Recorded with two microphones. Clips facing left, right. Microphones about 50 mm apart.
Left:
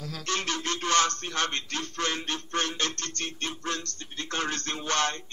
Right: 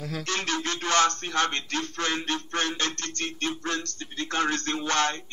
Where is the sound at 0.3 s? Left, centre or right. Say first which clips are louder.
Even; right.